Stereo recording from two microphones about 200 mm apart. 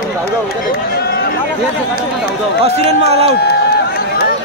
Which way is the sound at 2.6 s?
30° right (ahead or behind).